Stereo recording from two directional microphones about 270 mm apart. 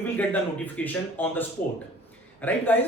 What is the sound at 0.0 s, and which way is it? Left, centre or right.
A man's voice, centre.